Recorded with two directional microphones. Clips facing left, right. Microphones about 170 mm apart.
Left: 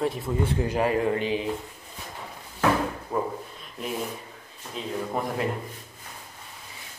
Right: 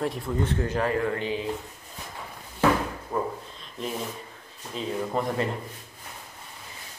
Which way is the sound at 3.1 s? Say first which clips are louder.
Even; 10° left (ahead or behind).